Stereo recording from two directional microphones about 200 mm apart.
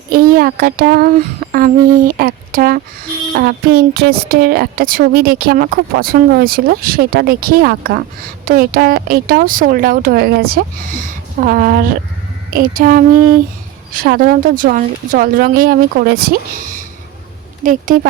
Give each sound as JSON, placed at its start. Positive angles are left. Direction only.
{"t": 0.1, "sound": "a woman's voice", "side_deg": -45}
{"t": 17.7, "sound": "a woman's voice", "side_deg": -40}